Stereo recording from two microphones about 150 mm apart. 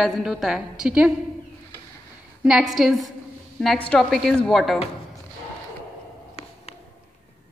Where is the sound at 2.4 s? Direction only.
5° right (ahead or behind).